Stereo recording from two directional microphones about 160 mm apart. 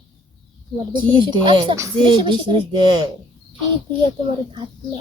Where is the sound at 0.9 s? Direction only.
30° right (ahead or behind).